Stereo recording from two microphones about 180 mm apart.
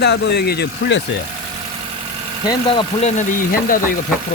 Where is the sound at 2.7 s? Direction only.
30° left (ahead or behind).